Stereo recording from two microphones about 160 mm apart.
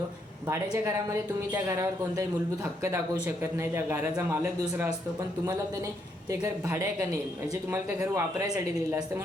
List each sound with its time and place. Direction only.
0.7 s a man's voice: 15° right (ahead or behind)
6.3 s a man's voice: 20° right (ahead or behind)